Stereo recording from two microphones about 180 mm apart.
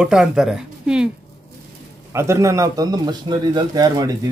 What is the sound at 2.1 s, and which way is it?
Speech, 15° right (ahead or behind).